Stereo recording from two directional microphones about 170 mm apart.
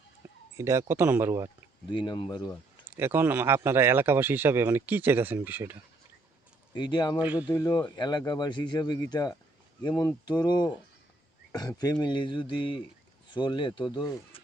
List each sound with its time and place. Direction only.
0.5 s speech: 15° right (ahead or behind)
1.9 s speech: 25° left (ahead or behind)
2.9 s speech: 10° right (ahead or behind)
6.7 s speech: 25° left (ahead or behind)
7.2 s speech: 10° right (ahead or behind)
7.5 s speech: 20° left (ahead or behind)